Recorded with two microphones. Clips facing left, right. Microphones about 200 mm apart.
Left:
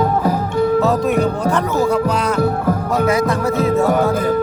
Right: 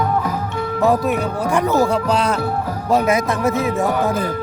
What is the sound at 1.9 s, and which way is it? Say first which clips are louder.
Speech: left 1 dB; 30° right (ahead or behind).